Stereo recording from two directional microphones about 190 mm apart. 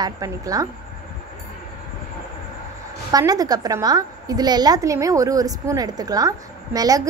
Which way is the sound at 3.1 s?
20° right (ahead or behind).